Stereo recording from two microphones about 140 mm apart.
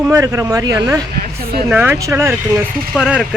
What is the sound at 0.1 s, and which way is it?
Speech, 20° right (ahead or behind).